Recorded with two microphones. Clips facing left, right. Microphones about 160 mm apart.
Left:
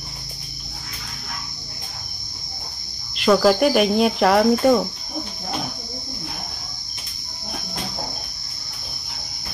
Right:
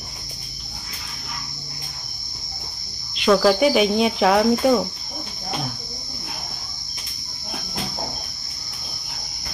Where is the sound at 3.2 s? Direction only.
Centre (ahead or behind).